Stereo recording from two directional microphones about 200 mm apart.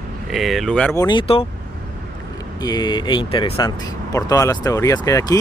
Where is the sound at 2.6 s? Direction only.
20° left (ahead or behind).